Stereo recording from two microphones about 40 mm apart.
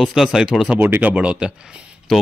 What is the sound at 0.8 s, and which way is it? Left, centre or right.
Speech, right.